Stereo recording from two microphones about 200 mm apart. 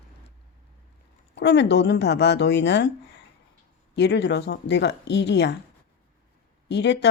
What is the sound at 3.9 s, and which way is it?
Speech, 60° left (ahead or behind).